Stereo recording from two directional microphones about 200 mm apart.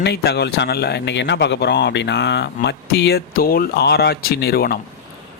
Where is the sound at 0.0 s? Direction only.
55° left (ahead or behind).